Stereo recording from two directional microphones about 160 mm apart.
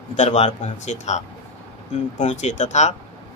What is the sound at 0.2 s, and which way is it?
Speech, 45° left (ahead or behind).